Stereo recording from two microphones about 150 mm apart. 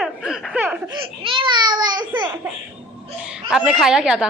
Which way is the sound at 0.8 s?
35° right (ahead or behind).